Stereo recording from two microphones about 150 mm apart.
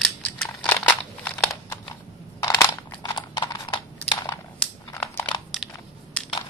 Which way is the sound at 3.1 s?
30° left (ahead or behind).